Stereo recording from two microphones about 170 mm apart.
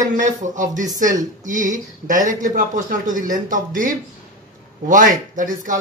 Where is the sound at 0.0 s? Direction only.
45° right (ahead or behind).